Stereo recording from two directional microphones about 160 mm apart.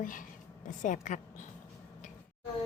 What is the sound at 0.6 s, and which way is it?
Speech, 50° left (ahead or behind).